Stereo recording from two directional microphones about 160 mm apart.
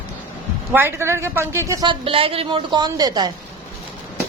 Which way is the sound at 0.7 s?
15° right (ahead or behind).